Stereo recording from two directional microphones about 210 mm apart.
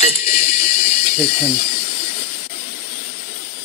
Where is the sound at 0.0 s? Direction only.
40° left (ahead or behind).